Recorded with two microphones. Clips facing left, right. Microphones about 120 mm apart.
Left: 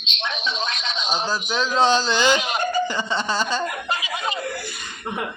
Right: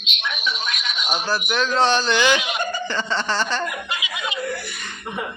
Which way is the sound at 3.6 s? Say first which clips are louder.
Left 2 dB; 35° left (ahead or behind).